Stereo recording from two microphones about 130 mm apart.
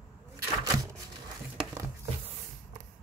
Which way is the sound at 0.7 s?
25° right (ahead or behind).